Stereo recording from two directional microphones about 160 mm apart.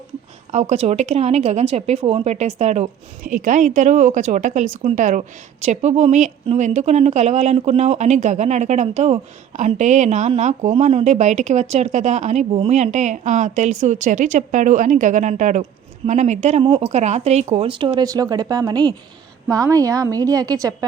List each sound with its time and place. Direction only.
0.5 s a woman's voice: 45° right (ahead or behind); by 20.7 s 25° right (ahead or behind)